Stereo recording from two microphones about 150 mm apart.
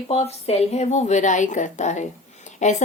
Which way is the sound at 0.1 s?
45° left (ahead or behind).